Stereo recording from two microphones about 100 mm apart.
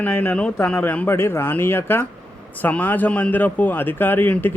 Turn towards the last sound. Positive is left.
turn(degrees=20)  # may be behind; listen again after turning